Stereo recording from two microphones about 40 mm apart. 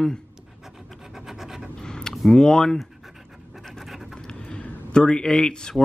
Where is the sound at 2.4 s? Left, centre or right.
Centre.